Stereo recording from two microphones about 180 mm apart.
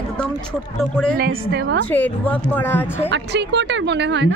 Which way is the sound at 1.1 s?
55° right (ahead or behind).